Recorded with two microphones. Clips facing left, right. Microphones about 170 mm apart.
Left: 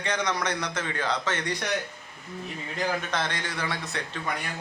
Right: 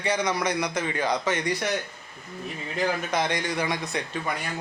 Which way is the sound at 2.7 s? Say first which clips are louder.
Right 3 dB; 10° right (ahead or behind).